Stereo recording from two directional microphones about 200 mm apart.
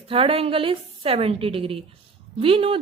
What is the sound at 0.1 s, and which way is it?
A woman's voice, 30° right (ahead or behind).